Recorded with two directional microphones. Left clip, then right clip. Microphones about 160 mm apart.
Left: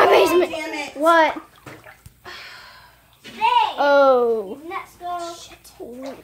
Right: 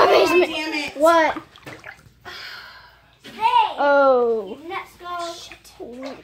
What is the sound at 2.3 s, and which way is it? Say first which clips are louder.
Gasp: right 2 dB; 15° right (ahead or behind).